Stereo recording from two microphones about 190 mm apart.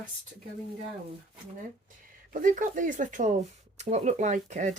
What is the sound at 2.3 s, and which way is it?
Speech, 45° right (ahead or behind).